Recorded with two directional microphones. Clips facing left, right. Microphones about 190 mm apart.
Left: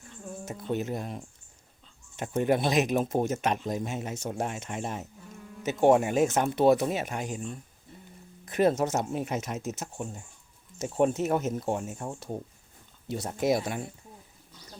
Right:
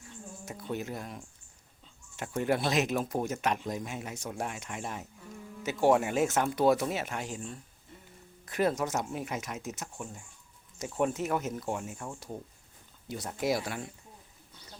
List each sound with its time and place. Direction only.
0.4 s speech: 25° left (ahead or behind)